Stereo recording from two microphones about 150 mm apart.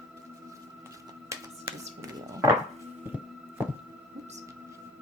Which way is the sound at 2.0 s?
25° right (ahead or behind).